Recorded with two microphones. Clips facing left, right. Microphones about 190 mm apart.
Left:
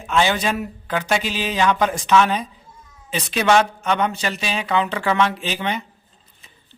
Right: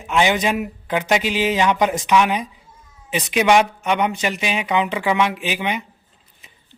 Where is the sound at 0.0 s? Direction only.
15° right (ahead or behind).